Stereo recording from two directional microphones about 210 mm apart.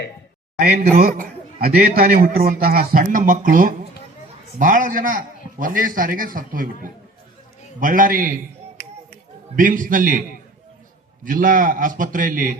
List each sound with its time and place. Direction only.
0.6 s a man's voice: 45° right (ahead or behind)
8.8 s finger snapping: 45° left (ahead or behind)
9.6 s a man's voice: 40° right (ahead or behind)
11.2 s a man's voice: 40° right (ahead or behind)